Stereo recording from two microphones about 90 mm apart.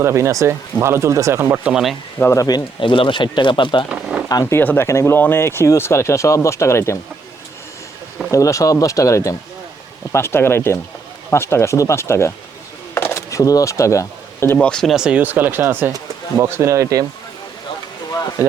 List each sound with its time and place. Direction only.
0.0 s speech: 30° right (ahead or behind)
1.6 s speech: 5° right (ahead or behind)
2.3 s speech: 40° left (ahead or behind)
2.8 s speech: 70° left (ahead or behind)
3.8 s a sound: 10° right (ahead or behind)
4.3 s speech: 45° left (ahead or behind)
4.5 s speech: 25° left (ahead or behind)
8.3 s speech: 35° left (ahead or behind)
12.9 s a sound: 30° left (ahead or behind)
14.6 s speech: 5° left (ahead or behind)
14.9 s speech: 10° right (ahead or behind)
16.4 s speech: 30° right (ahead or behind)
18.4 s speech: 25° right (ahead or behind)